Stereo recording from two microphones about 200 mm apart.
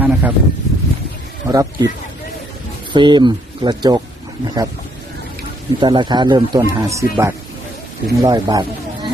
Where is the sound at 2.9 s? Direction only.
25° right (ahead or behind).